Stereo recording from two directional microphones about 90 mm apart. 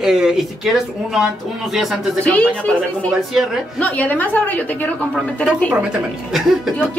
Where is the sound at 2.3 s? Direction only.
15° left (ahead or behind).